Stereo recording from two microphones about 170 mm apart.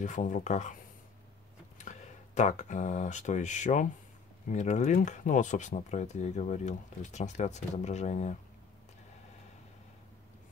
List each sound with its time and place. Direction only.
0.0 s speech: 50° left (ahead or behind)
1.9 s speech: 45° left (ahead or behind)